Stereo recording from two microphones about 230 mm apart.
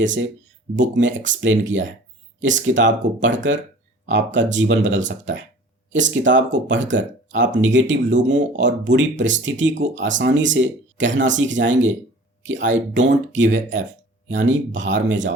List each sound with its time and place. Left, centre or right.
0.8 s speech: right